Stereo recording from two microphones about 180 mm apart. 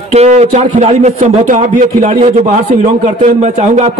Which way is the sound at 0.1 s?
35° right (ahead or behind).